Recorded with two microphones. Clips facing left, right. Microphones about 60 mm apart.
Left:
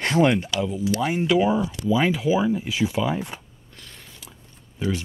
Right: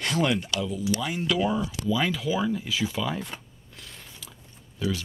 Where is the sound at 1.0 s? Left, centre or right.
Left.